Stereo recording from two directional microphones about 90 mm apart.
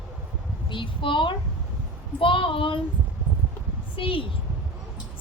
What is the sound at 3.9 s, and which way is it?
Speech, 75° left (ahead or behind).